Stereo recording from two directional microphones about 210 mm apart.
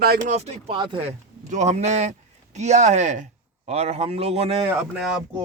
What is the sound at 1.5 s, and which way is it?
A man's voice, 35° right (ahead or behind).